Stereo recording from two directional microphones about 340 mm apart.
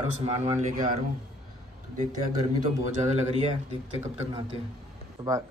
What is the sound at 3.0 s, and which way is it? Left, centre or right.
Speech, centre.